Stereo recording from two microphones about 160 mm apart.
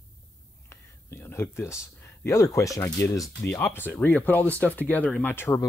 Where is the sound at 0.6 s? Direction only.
15° left (ahead or behind).